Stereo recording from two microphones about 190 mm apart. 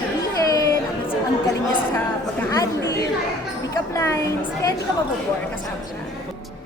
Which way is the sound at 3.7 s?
15° left (ahead or behind).